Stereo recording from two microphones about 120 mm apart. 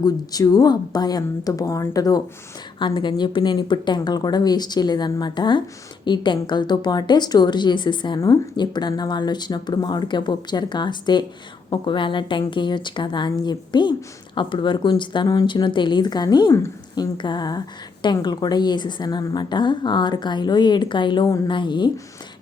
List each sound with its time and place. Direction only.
0.0 s a woman's voice: 30° left (ahead or behind)
21.2 s a woman's voice: 30° left (ahead or behind)
21.5 s a woman's voice: 40° left (ahead or behind)